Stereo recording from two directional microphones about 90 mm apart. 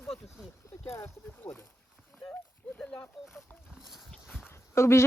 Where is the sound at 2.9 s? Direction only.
20° left (ahead or behind).